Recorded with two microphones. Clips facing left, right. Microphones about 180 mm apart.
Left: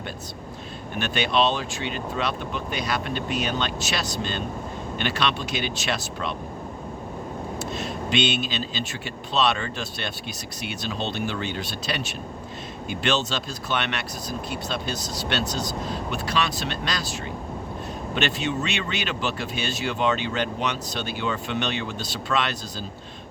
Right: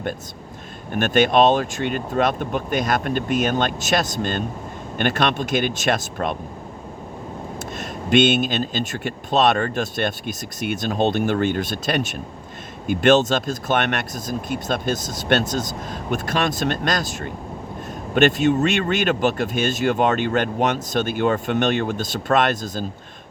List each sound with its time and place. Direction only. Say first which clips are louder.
0.9 s speech: right 7 dB; 50° right (ahead or behind)
7.8 s speech: right 8 dB; 50° right (ahead or behind)